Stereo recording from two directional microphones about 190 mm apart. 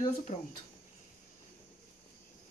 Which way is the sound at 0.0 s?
40° left (ahead or behind).